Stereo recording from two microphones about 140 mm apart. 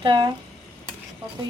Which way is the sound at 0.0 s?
35° right (ahead or behind).